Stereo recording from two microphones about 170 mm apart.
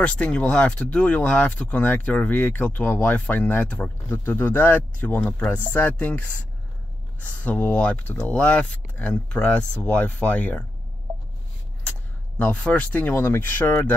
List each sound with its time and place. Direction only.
0.0 s speech: 5° left (ahead or behind)
12.4 s speech: 5° left (ahead or behind)